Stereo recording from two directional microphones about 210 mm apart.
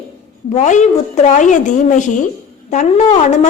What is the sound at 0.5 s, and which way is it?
A woman's voice, 35° left (ahead or behind).